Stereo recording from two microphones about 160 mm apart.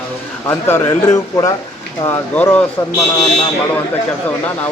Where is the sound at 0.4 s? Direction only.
15° left (ahead or behind).